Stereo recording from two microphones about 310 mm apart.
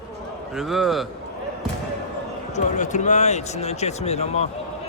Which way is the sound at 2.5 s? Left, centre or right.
Left.